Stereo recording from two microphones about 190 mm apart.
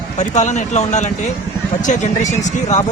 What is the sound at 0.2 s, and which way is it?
Speech, 40° left (ahead or behind).